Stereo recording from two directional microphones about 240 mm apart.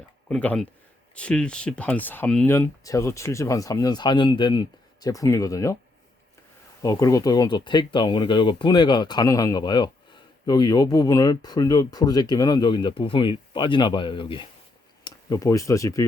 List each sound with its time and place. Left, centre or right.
0.3 s speech: centre
6.8 s speech: centre